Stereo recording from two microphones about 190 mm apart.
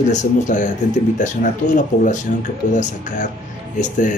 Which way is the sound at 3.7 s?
40° left (ahead or behind).